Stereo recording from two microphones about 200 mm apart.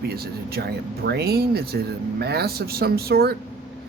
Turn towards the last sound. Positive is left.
turn(degrees=-50)  # may be behind; listen again after turning